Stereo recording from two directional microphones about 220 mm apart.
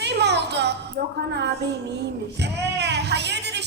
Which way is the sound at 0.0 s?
50° right (ahead or behind).